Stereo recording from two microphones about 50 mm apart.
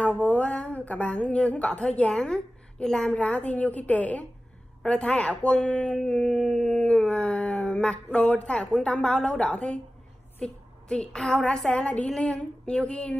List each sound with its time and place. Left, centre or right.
0.2 s a woman's voice: left; by 3.2 s centre
3.2 s speech: left
4.8 s speech: centre
5.9 s a woman's voice: centre
6.5 s a sound: centre
6.8 s a woman's voice: centre